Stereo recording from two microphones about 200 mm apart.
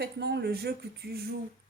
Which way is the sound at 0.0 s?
55° right (ahead or behind).